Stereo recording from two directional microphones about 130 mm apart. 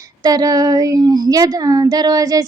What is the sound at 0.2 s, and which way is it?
Child singing, 30° right (ahead or behind).